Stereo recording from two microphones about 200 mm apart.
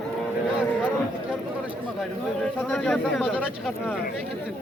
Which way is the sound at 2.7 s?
Centre (ahead or behind).